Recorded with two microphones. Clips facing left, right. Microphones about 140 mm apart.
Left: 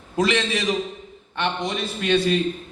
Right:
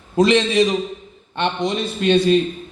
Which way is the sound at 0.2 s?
25° right (ahead or behind).